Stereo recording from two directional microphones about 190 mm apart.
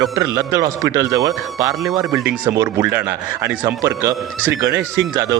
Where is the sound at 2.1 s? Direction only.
5° right (ahead or behind).